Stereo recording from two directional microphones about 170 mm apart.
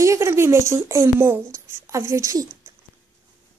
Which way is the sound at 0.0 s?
15° right (ahead or behind).